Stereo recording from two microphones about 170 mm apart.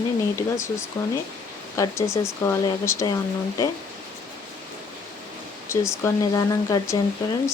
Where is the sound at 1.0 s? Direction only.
15° left (ahead or behind).